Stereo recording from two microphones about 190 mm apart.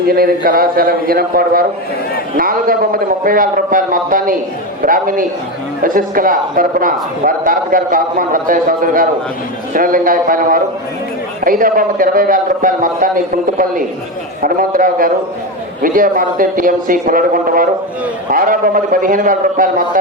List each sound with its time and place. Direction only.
0.1 s a man's voice: 50° right (ahead or behind)